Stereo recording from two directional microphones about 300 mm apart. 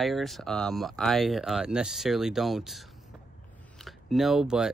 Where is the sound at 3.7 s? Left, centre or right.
Centre.